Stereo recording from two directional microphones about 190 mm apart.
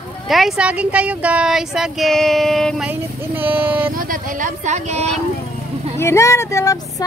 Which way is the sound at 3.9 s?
45° right (ahead or behind).